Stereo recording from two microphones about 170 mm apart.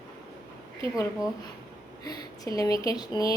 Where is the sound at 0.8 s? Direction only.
20° left (ahead or behind).